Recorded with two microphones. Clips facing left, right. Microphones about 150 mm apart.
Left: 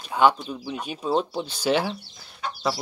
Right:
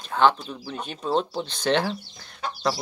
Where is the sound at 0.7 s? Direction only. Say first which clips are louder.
Even; 10° left (ahead or behind).